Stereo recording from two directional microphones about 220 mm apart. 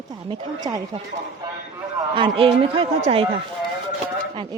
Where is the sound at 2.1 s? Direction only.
25° right (ahead or behind).